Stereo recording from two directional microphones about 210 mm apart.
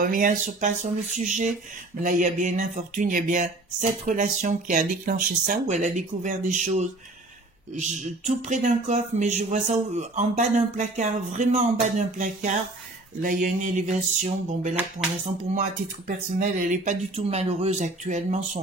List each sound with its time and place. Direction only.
0.0 s speech: 40° right (ahead or behind)
16.3 s speech: 35° right (ahead or behind)